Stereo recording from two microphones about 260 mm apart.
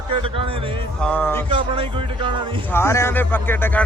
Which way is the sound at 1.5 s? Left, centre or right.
Right.